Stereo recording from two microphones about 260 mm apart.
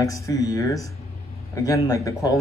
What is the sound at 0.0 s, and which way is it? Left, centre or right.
A man's voice, centre.